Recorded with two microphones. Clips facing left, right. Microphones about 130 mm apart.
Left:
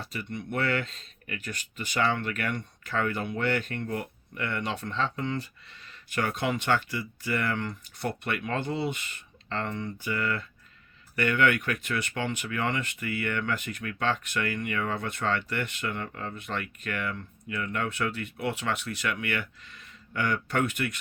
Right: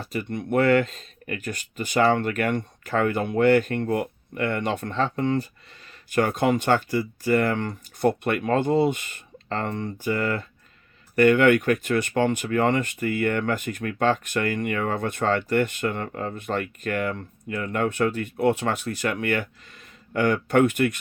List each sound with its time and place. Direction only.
0.0 s speech: 45° right (ahead or behind)